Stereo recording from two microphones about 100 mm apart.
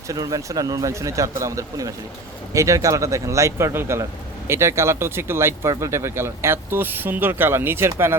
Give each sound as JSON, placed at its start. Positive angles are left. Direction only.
{"t": 0.1, "sound": "speech", "side_deg": -35}